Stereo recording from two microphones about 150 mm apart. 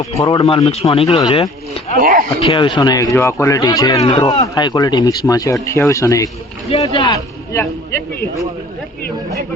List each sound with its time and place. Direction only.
0.2 s speech: 25° left (ahead or behind)
0.5 s speech: 40° left (ahead or behind)
2.0 s speech: 65° right (ahead or behind)
2.4 s speech: 35° left (ahead or behind)
6.7 s speech: 40° left (ahead or behind)